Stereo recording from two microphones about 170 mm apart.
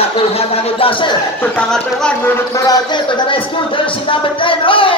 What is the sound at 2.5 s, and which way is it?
Speech, 20° left (ahead or behind).